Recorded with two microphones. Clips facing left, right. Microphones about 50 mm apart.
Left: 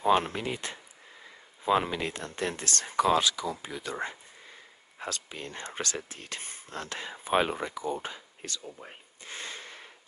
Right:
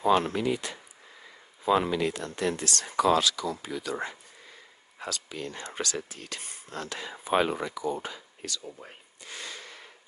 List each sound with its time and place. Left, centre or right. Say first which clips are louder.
0.0 s speech: right 1 dB; left
5.0 s speech: right 2 dB; left
8.8 s a sound: left 1 dB; left